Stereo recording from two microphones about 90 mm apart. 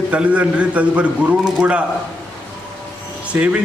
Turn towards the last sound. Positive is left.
turn(degrees=-15)  # may be behind; listen again after turning